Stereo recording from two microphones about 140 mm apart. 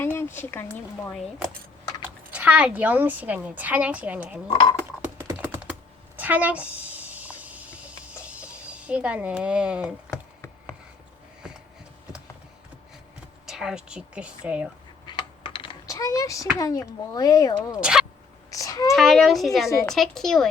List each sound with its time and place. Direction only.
0.0 s speech: 15° left (ahead or behind)
2.3 s a woman's voice: 10° right (ahead or behind)
5.0 s typing: 15° right (ahead or behind)
6.1 s a sound: 10° right (ahead or behind)
11.4 s a sound: 5° right (ahead or behind)
13.5 s a woman's voice: 5° right (ahead or behind)
15.0 s coin: 35° left (ahead or behind)
15.9 s speech: 25° left (ahead or behind)
17.7 s a woman's voice: 5° right (ahead or behind)
18.5 s a sound: 25° left (ahead or behind)
18.9 s a woman's voice: centre (ahead or behind)